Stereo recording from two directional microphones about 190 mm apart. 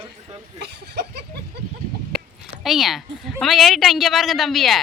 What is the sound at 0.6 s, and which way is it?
Speech, 60° right (ahead or behind).